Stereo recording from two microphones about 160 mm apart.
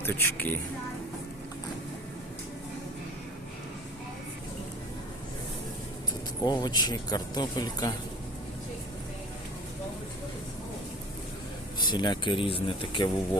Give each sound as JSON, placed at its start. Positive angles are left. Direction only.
{"t": 0.0, "sound": "a woman's voice", "side_deg": 15}
{"t": 6.4, "sound": "speech", "side_deg": 25}
{"t": 11.9, "sound": "speech", "side_deg": 30}